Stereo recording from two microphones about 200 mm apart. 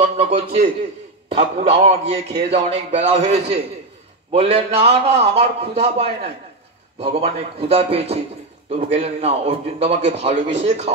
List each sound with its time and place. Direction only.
0.0 s a man's voice: 30° right (ahead or behind)